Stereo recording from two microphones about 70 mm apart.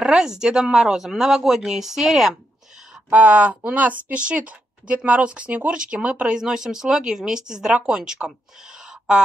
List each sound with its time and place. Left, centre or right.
0.0 s a woman's voice: centre
3.1 s a woman's voice: right
8.8 s a sound: centre